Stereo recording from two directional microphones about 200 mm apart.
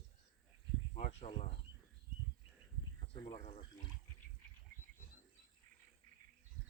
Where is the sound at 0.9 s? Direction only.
30° left (ahead or behind).